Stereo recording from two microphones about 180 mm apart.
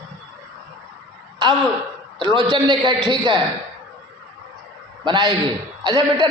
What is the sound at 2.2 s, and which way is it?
A man's voice, 25° right (ahead or behind).